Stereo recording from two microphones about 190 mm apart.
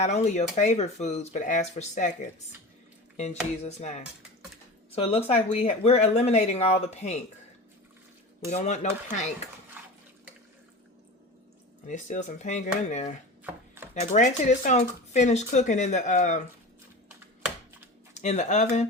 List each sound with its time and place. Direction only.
0.0 s speech: 35° left (ahead or behind)
3.6 s speech: 35° left (ahead or behind)
8.4 s speech: 35° left (ahead or behind)
9.8 s water: 10° right (ahead or behind)
11.9 s speech: 40° left (ahead or behind)
18.2 s speech: 40° left (ahead or behind)